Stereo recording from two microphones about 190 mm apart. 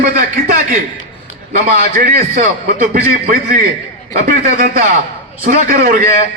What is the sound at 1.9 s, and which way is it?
A man's voice, 50° right (ahead or behind).